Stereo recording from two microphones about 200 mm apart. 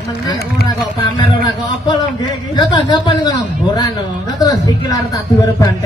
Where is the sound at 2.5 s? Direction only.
25° left (ahead or behind).